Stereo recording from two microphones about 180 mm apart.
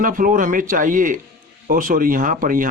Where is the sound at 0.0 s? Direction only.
50° right (ahead or behind).